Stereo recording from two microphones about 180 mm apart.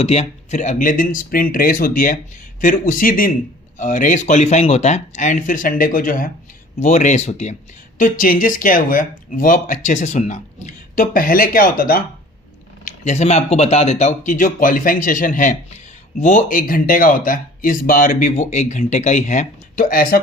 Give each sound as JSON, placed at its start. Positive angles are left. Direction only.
{"t": 0.0, "sound": "speech", "side_deg": 35}
{"t": 7.9, "sound": "speech", "side_deg": 50}
{"t": 12.8, "sound": "speech", "side_deg": 40}